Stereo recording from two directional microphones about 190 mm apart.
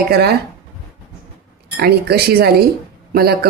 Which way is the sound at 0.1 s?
55° right (ahead or behind).